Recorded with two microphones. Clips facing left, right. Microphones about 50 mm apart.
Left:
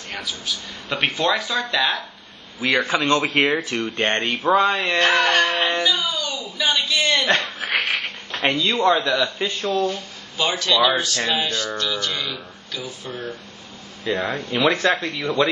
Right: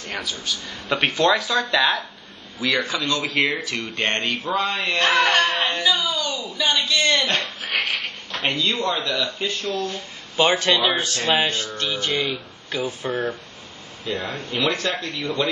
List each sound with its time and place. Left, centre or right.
0.1 s speech: centre
2.7 s speech: left
4.9 s a sound: centre
7.2 s a sound: left
8.5 s speech: left
9.9 s speech: right
14.0 s speech: left